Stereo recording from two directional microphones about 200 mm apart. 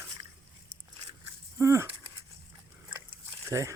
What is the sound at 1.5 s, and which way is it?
Speech, 15° right (ahead or behind).